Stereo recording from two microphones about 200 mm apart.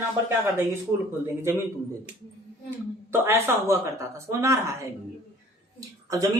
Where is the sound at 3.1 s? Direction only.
10° right (ahead or behind).